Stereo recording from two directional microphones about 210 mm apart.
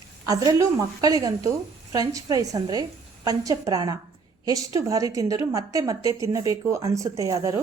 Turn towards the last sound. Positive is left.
turn(degrees=-15)  # may be behind; listen again after turning